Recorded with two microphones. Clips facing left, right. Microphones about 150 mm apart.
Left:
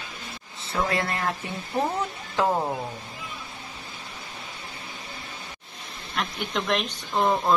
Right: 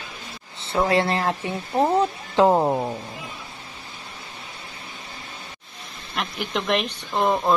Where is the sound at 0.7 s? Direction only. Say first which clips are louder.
Right 6 dB; 30° right (ahead or behind).